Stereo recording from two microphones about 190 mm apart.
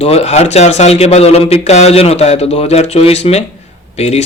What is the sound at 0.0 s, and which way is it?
Speech, 35° left (ahead or behind).